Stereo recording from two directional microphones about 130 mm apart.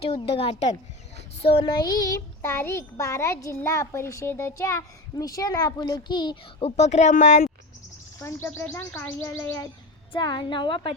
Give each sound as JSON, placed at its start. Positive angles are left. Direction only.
{"t": 0.0, "sound": "a woman's voice", "side_deg": 50}
{"t": 1.8, "sound": "a child's voice", "side_deg": 30}
{"t": 6.6, "sound": "speech", "side_deg": 55}
{"t": 8.2, "sound": "a child's voice", "side_deg": 20}
{"t": 10.1, "sound": "a woman's voice", "side_deg": 35}